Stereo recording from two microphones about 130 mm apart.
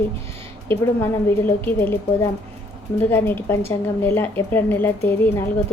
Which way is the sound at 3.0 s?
15° left (ahead or behind).